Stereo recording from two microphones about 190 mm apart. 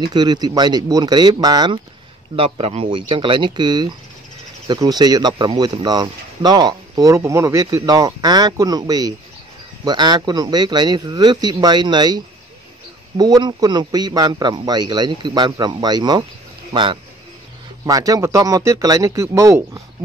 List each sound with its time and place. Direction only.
0.0 s speech: 25° right (ahead or behind)
13.2 s speech: 20° right (ahead or behind)